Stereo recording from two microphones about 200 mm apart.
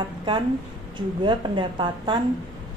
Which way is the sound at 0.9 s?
20° right (ahead or behind).